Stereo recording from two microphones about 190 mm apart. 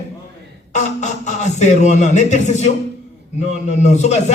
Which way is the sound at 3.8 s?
35° left (ahead or behind).